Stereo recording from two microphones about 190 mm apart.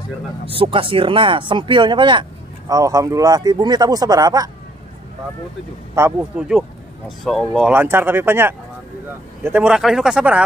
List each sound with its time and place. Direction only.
0.5 s speech: 30° right (ahead or behind)
5.9 s speech: 10° right (ahead or behind)